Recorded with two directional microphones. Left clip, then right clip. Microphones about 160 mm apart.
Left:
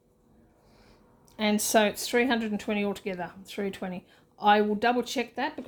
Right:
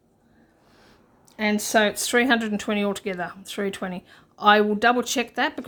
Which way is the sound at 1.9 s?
20° right (ahead or behind).